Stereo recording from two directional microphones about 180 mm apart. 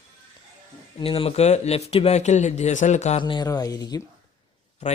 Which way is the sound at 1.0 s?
30° left (ahead or behind).